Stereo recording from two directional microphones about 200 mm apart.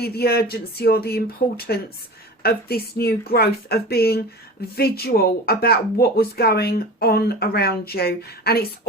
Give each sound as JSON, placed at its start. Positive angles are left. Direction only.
{"t": 0.0, "sound": "speech", "side_deg": 50}